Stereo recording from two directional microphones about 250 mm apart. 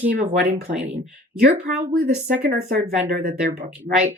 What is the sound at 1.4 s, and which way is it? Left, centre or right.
Speech, right.